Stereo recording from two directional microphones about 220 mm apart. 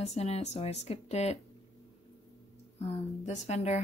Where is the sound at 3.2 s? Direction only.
30° left (ahead or behind).